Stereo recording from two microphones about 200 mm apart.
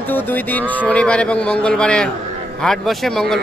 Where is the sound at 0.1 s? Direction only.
10° left (ahead or behind).